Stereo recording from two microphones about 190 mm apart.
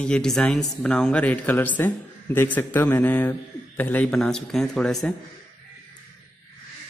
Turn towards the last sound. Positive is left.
turn(degrees=5)  # may be behind; listen again after turning